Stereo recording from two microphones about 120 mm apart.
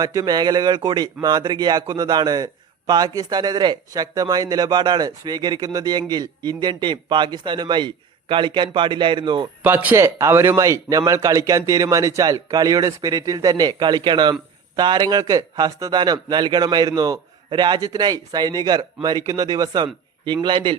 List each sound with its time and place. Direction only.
0.0 s speech: 35° right (ahead or behind)
9.6 s a man's voice: 15° right (ahead or behind); by 20.7 s 40° right (ahead or behind)